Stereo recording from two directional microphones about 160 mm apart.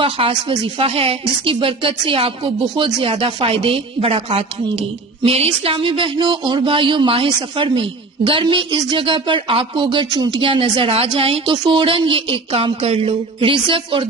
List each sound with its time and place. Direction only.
0.0 s a woman's voice: 35° right (ahead or behind)